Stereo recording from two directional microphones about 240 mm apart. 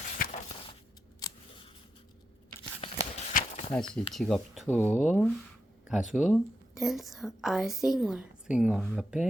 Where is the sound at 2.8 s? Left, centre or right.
Left.